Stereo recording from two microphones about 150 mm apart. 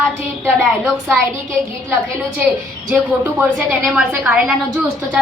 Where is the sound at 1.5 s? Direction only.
15° right (ahead or behind).